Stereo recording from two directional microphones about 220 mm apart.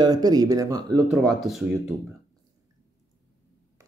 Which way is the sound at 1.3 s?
Centre (ahead or behind).